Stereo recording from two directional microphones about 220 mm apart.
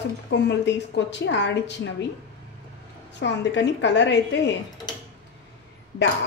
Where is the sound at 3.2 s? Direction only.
55° left (ahead or behind).